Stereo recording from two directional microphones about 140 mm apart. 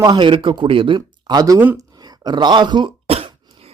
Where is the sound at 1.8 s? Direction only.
30° right (ahead or behind); by 3.7 s 45° right (ahead or behind).